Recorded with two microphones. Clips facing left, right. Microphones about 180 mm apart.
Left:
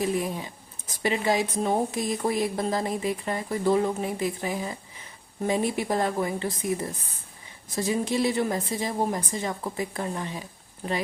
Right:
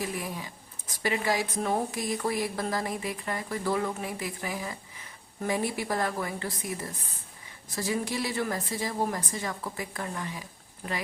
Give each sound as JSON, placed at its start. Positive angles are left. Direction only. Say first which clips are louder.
{"t": 0.0, "sound": "speech", "louder": "left 7 dB", "side_deg": 25}